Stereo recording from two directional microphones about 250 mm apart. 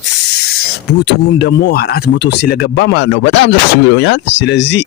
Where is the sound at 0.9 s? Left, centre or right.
Left.